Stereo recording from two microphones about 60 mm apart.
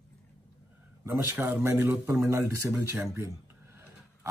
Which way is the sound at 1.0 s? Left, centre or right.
Right.